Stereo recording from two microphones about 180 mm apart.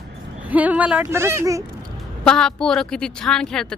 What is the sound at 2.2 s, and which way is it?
A woman's voice, 5° left (ahead or behind).